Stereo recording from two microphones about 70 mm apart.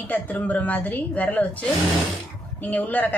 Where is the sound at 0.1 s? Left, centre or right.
Left.